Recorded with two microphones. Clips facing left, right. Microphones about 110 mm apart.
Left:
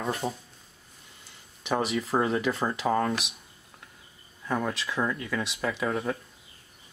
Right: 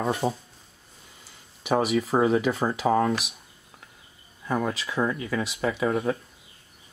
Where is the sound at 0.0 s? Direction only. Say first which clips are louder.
Right 5 dB; 25° right (ahead or behind).